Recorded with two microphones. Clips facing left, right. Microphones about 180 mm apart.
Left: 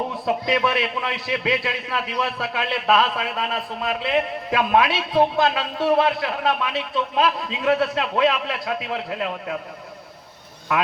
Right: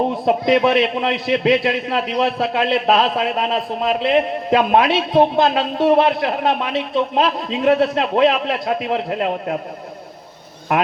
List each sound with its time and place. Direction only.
0.0 s a man's voice: 25° right (ahead or behind)